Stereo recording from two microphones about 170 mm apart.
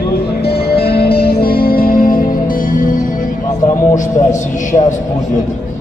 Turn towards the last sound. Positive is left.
turn(degrees=45)  # may be behind; listen again after turning